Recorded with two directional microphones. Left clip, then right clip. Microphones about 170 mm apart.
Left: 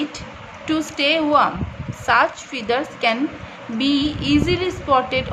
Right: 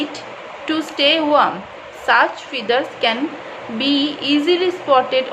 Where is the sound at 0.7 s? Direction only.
20° left (ahead or behind).